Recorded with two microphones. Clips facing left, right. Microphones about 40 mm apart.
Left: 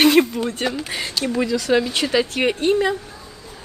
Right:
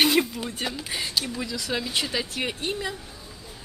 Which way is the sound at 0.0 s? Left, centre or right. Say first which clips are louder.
Left 7 dB; left.